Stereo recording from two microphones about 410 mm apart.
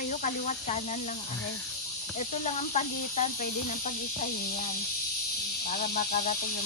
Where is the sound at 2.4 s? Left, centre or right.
Centre.